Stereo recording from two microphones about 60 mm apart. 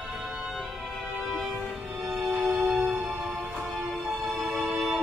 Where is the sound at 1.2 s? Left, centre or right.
Centre.